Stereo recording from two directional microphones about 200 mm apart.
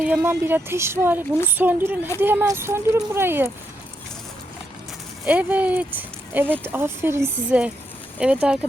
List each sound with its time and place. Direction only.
0.0 s speech: 10° right (ahead or behind)
5.2 s speech: 10° right (ahead or behind)